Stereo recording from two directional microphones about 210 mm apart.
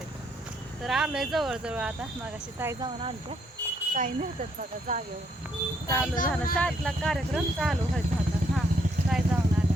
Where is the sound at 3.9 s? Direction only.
40° right (ahead or behind).